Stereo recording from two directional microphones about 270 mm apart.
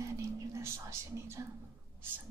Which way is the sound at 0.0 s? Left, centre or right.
Centre.